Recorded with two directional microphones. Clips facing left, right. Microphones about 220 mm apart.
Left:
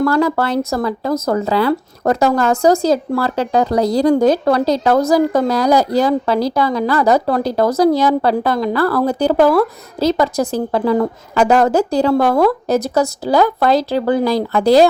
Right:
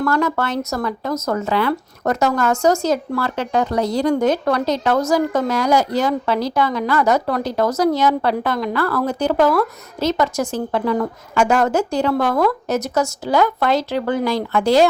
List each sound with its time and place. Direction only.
0.0 s speech: 30° left (ahead or behind)